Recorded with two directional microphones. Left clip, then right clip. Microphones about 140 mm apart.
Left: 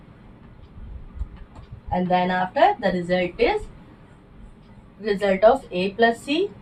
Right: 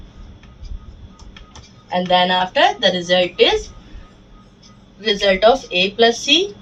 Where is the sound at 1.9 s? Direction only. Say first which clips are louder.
Right 6 dB; 10° left (ahead or behind).